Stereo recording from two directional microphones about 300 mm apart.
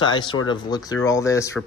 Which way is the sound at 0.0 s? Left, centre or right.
Centre.